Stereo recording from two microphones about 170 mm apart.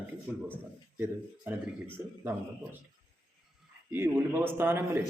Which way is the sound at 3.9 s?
15° right (ahead or behind).